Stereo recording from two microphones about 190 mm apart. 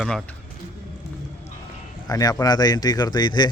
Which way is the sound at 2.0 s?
20° left (ahead or behind).